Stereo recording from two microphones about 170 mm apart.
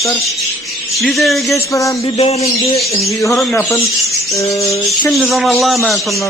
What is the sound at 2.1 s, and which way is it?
Speech, 40° left (ahead or behind).